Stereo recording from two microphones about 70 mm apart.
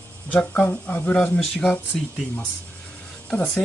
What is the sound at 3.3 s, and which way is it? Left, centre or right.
Speech, centre.